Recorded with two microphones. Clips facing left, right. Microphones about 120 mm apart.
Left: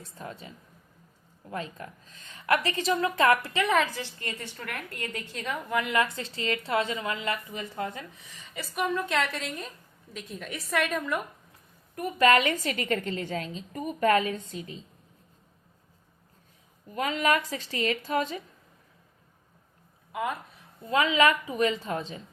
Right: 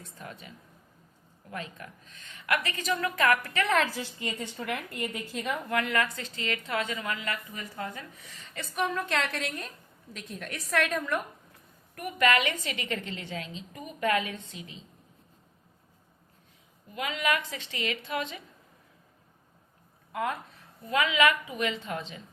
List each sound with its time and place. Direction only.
0.0 s a woman's voice: 30° left (ahead or behind)
3.9 s a woman's voice: 15° right (ahead or behind); by 5.9 s 5° left (ahead or behind)
5.9 s a woman's voice: 25° left (ahead or behind)
8.5 s a woman's voice: 5° left (ahead or behind)
11.9 s a woman's voice: 30° left (ahead or behind)
16.9 s a woman's voice: 40° left (ahead or behind)
20.8 s a woman's voice: 30° left (ahead or behind)